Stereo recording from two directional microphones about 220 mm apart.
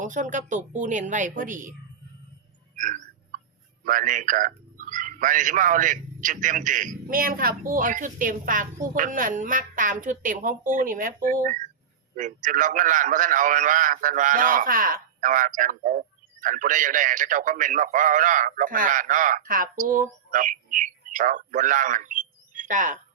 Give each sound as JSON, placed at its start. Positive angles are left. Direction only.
{"t": 0.0, "sound": "a man's voice", "side_deg": -35}
{"t": 2.7, "sound": "hiccup", "side_deg": -35}
{"t": 3.8, "sound": "a man's voice", "side_deg": -35}